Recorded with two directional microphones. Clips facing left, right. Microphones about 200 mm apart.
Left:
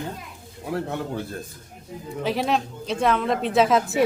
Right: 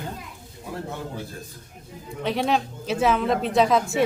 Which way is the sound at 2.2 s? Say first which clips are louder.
Even; centre (ahead or behind).